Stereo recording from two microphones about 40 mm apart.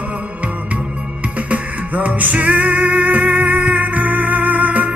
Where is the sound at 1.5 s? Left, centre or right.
Right.